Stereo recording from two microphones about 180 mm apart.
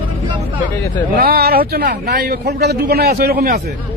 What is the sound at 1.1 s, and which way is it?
A man's voice, 60° right (ahead or behind).